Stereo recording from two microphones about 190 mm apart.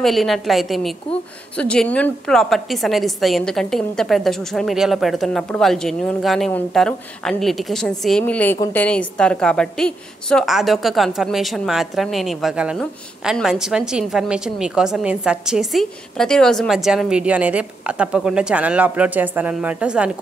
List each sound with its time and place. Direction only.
0.0 s a woman's voice: centre (ahead or behind)